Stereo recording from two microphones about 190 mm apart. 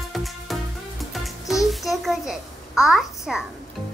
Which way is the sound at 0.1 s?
Centre (ahead or behind).